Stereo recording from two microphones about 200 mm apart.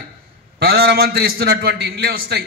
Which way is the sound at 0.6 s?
50° right (ahead or behind).